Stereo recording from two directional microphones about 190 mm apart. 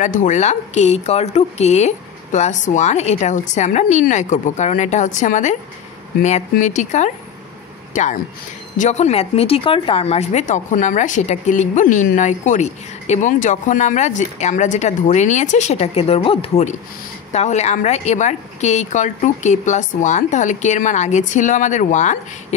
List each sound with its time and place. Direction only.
0.0 s speech: 40° left (ahead or behind)